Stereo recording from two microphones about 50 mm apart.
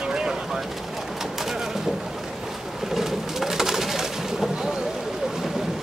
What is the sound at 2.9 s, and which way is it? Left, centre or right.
Bird, centre.